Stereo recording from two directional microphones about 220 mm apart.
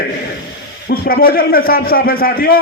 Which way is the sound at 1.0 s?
40° left (ahead or behind).